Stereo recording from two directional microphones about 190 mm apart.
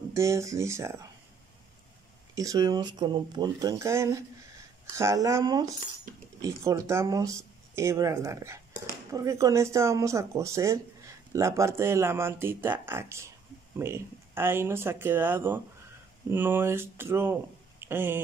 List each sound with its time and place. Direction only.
0.1 s speech: 15° right (ahead or behind)
2.3 s speech: 20° right (ahead or behind)